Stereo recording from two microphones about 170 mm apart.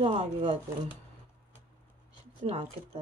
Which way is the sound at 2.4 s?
40° right (ahead or behind).